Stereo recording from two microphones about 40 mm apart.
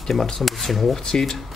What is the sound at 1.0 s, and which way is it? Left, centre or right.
Speech, centre.